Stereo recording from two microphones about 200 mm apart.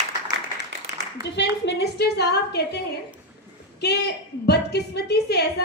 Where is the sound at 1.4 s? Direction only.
60° left (ahead or behind).